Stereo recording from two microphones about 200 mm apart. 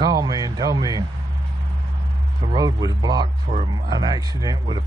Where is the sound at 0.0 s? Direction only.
20° right (ahead or behind).